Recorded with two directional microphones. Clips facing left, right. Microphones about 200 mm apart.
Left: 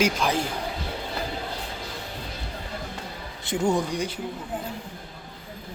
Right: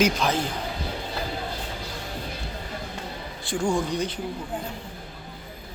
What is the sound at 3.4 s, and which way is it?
Speech, 20° left (ahead or behind).